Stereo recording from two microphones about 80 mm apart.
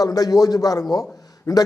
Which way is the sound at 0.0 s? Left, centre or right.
Left.